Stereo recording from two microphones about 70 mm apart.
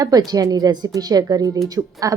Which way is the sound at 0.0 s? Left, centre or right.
Right.